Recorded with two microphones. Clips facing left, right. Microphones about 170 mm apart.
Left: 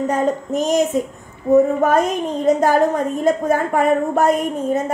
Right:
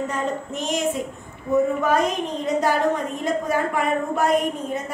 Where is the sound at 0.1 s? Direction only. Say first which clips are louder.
Left 8 dB; 40° left (ahead or behind).